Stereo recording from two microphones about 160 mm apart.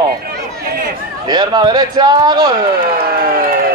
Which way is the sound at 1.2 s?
25° right (ahead or behind).